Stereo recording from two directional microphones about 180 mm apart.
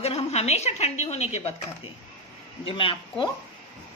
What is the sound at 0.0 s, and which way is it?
A woman's voice, 35° left (ahead or behind).